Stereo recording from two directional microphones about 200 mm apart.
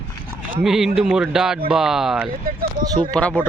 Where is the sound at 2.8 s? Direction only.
20° right (ahead or behind).